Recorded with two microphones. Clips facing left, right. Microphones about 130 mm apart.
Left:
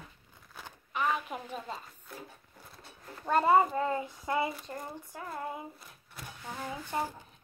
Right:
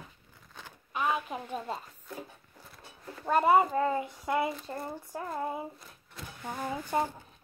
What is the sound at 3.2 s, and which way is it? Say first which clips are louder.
Speech: right 1 dB; 5° right (ahead or behind).